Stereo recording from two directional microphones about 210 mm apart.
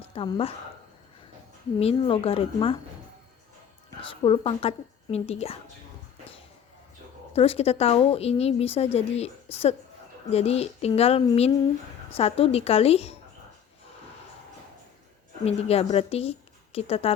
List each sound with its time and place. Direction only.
0.1 s speech: 25° left (ahead or behind)
1.8 s a woman's voice: 25° left (ahead or behind)
4.0 s a woman's voice: 25° left (ahead or behind)
7.3 s a woman's voice: 30° left (ahead or behind)
15.4 s a woman's voice: 30° left (ahead or behind)